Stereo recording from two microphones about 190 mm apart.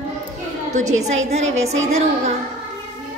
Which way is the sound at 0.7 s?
40° right (ahead or behind).